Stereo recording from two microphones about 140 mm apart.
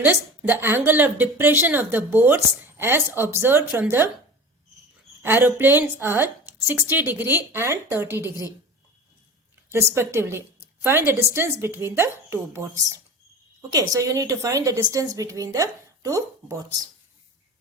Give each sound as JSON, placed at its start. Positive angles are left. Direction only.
{"t": 0.0, "sound": "a woman's voice", "side_deg": -15}
{"t": 5.2, "sound": "a woman's voice", "side_deg": -15}
{"t": 9.6, "sound": "a woman's voice", "side_deg": -20}